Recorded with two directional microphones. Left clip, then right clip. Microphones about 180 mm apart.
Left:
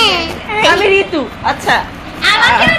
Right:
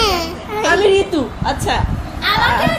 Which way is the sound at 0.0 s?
90° right.